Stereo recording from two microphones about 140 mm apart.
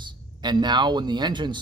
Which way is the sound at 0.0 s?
30° right (ahead or behind).